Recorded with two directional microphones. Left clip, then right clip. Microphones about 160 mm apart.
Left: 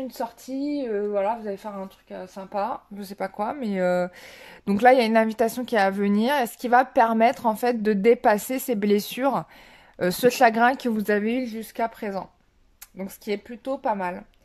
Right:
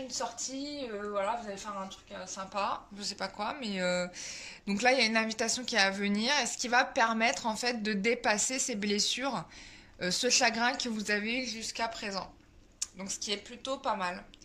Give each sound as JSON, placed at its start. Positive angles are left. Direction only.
{"t": 1.1, "sound": "speech", "side_deg": 55}